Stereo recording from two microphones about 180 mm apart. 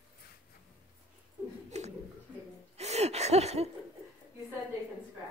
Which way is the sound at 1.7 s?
40° right (ahead or behind).